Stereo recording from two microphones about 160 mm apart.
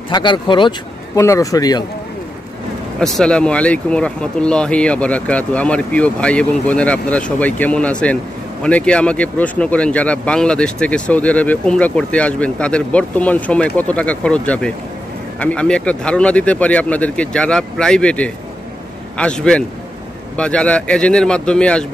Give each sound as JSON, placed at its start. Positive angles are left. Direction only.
{"t": 0.1, "sound": "speech", "side_deg": 30}
{"t": 3.0, "sound": "speech", "side_deg": 5}